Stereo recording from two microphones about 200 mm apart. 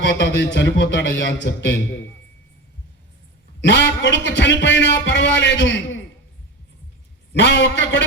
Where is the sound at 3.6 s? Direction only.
60° left (ahead or behind).